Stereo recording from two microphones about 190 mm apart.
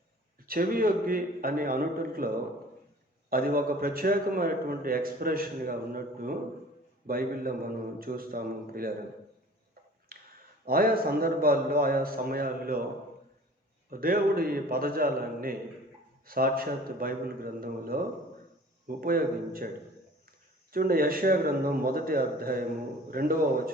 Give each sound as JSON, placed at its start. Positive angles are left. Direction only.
{"t": 0.4, "sound": "a man's voice", "side_deg": -50}
{"t": 10.1, "sound": "a sound", "side_deg": -50}
{"t": 10.7, "sound": "a man's voice", "side_deg": -50}
{"t": 13.9, "sound": "a man's voice", "side_deg": -50}
{"t": 20.7, "sound": "a man's voice", "side_deg": -50}